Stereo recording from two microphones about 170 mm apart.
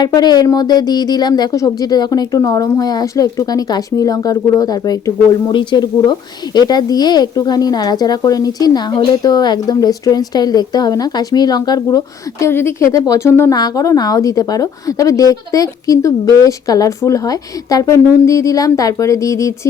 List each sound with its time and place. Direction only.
0.0 s speech: 25° left (ahead or behind)